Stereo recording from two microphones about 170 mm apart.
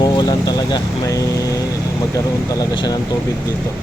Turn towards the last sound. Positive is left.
turn(degrees=25)  # may be behind; listen again after turning